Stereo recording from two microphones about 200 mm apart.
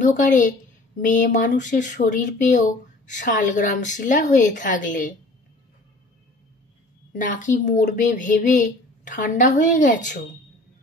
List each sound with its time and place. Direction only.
0.0 s a woman's voice: 40° left (ahead or behind)
7.1 s a woman's voice: 40° left (ahead or behind)